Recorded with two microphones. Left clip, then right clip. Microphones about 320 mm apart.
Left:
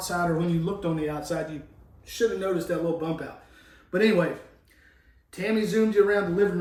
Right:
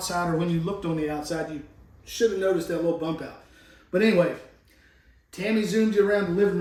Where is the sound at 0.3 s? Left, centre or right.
Centre.